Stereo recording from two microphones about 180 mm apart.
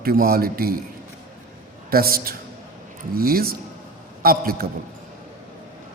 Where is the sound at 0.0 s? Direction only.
55° right (ahead or behind).